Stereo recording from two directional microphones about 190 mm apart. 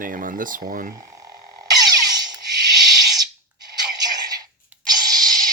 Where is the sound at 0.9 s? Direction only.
15° right (ahead or behind).